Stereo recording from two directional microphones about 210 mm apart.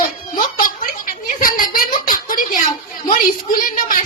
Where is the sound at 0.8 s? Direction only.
40° left (ahead or behind).